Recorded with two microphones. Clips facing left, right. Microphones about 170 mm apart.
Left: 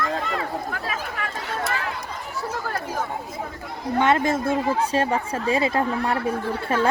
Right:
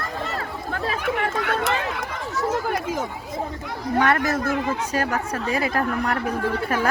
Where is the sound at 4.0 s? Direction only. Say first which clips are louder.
Left 1 dB; 20° left (ahead or behind).